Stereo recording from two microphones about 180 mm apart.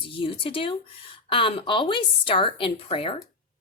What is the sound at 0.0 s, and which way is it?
Speech, 30° left (ahead or behind).